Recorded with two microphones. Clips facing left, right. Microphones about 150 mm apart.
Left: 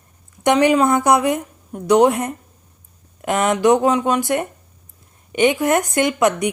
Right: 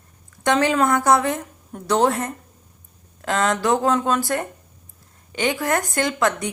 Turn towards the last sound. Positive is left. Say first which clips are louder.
# left 5 dB
turn(degrees=20)  # may be behind; listen again after turning